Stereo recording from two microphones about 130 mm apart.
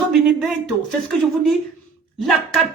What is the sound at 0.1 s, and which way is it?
A man's voice, 5° right (ahead or behind).